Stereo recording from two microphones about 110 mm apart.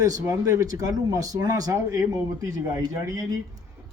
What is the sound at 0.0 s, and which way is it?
A man's voice, 30° right (ahead or behind).